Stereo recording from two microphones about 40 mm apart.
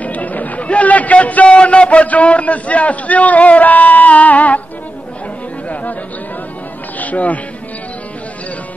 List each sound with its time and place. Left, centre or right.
0.0 s a man's voice: left
7.0 s music: left